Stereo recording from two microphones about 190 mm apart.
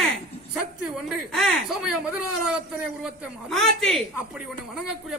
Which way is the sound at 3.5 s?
Centre (ahead or behind).